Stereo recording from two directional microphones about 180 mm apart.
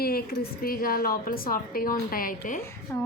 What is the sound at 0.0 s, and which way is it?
A woman's voice, 55° left (ahead or behind).